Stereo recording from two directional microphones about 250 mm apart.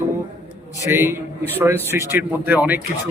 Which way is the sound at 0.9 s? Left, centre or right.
Centre.